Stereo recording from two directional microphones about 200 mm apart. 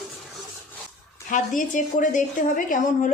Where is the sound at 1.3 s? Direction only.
40° left (ahead or behind).